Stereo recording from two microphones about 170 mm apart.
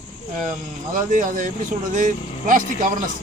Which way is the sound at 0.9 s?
50° right (ahead or behind).